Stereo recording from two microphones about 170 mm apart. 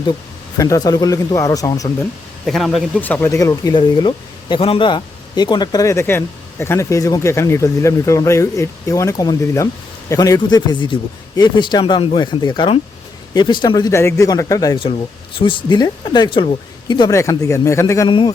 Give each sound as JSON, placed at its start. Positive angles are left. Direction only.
{"t": 0.0, "sound": "speech", "side_deg": 25}
{"t": 2.5, "sound": "speech", "side_deg": 0}
{"t": 3.0, "sound": "speech", "side_deg": 10}